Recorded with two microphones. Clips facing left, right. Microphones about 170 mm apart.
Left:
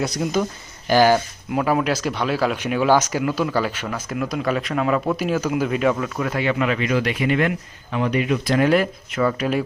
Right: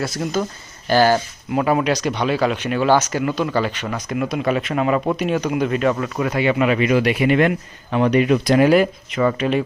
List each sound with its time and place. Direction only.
0.9 s speech: 15° left (ahead or behind)
1.5 s speech: centre (ahead or behind)
7.3 s speech: 60° right (ahead or behind)
8.4 s speech: 15° right (ahead or behind)
8.7 s speech: centre (ahead or behind)